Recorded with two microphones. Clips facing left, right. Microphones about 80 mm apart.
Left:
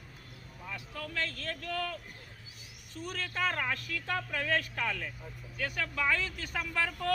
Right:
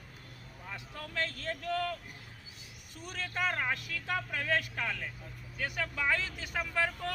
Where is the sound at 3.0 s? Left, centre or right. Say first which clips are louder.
Left 1 dB; centre.